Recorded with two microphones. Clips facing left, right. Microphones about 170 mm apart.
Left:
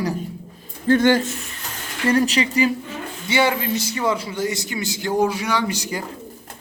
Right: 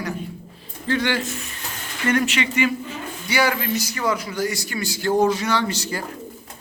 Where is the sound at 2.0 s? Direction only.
35° left (ahead or behind).